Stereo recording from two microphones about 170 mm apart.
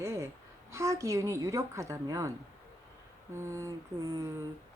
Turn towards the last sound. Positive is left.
turn(degrees=-20)  # may be behind; listen again after turning